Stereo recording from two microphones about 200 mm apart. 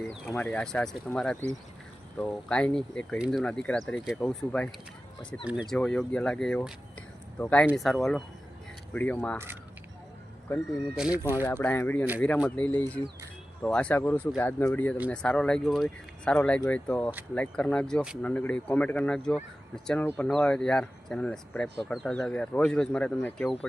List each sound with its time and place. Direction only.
0.3 s speech: 5° left (ahead or behind)
5.5 s speech: 5° right (ahead or behind)
10.9 s speech: 5° right (ahead or behind)
11.4 s speech: 10° left (ahead or behind)